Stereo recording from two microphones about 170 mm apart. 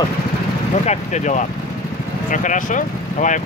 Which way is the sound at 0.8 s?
45° left (ahead or behind).